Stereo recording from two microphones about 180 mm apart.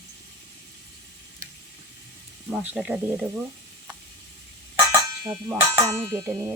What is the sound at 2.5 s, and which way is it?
Speech, 5° right (ahead or behind).